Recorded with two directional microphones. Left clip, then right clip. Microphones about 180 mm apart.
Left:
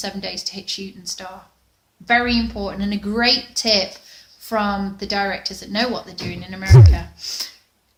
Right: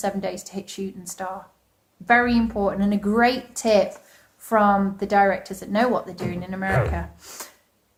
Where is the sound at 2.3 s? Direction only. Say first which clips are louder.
Right 1 dB; 15° left (ahead or behind).